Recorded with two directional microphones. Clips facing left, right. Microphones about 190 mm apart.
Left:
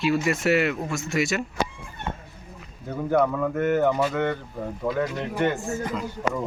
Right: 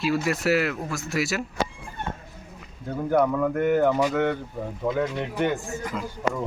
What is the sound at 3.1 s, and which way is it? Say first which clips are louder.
Speech: right 1 dB; centre (ahead or behind).